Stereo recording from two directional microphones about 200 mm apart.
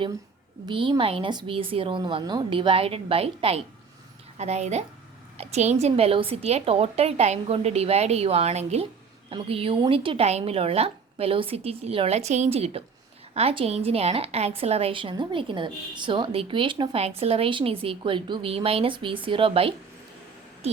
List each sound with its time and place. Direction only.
0.6 s a woman's voice: 25° right (ahead or behind)